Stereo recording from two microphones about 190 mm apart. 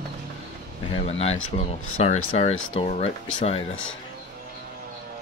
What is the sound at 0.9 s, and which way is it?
Speech, 30° left (ahead or behind).